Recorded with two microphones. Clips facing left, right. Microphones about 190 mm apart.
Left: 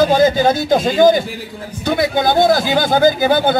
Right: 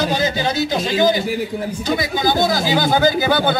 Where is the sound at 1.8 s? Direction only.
60° left (ahead or behind).